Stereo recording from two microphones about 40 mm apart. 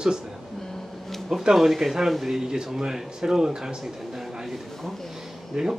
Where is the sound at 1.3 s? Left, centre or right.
Centre.